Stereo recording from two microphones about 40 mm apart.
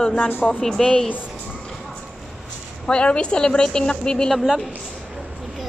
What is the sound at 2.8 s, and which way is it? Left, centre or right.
A woman's voice, left.